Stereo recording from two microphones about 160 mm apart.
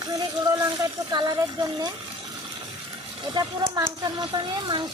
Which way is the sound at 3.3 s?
25° right (ahead or behind).